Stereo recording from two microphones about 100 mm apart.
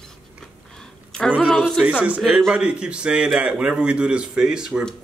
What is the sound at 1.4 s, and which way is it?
Speech, 15° left (ahead or behind).